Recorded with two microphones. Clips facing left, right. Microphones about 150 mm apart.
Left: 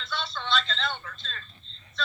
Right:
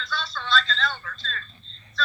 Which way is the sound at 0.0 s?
25° left (ahead or behind).